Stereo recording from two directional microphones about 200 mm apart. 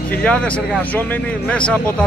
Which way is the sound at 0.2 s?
5° left (ahead or behind).